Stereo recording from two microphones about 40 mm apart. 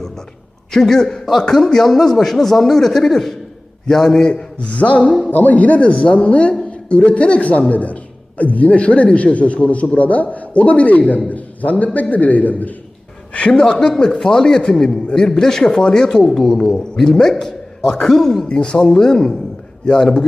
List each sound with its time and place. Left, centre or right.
0.7 s a man's voice: centre
4.2 s speech: left
5.3 s a man's voice: left
13.5 s speech: centre
15.8 s speech: left
16.3 s a man's voice: centre
18.4 s speech: left
18.8 s speech: centre